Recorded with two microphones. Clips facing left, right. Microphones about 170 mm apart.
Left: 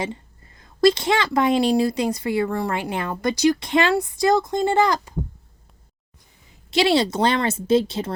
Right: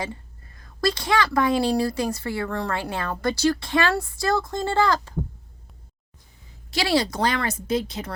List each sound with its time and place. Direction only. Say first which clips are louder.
0.0 s a woman's voice: left 3 dB; 20° left (ahead or behind)
6.7 s a woman's voice: left 4 dB; 25° left (ahead or behind)